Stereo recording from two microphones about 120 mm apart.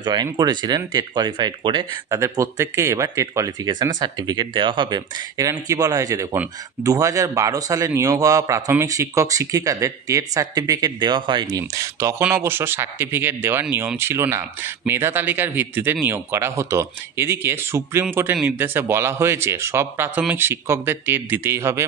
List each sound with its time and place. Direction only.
0.0 s speech: 35° right (ahead or behind)
2.0 s speech: 25° right (ahead or behind); by 11.6 s 40° right (ahead or behind)
11.7 s speech: 25° right (ahead or behind)